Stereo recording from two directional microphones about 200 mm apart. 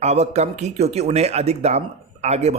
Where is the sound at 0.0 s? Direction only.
35° right (ahead or behind).